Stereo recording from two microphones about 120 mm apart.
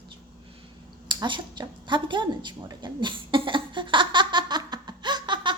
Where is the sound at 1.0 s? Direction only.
40° right (ahead or behind).